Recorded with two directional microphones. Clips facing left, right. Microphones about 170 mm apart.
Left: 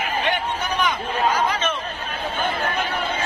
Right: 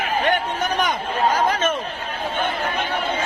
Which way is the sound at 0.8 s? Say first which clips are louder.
Even; 45° right (ahead or behind).